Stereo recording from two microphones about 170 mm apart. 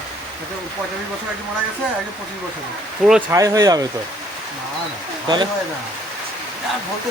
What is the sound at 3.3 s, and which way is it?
Speech, 20° right (ahead or behind).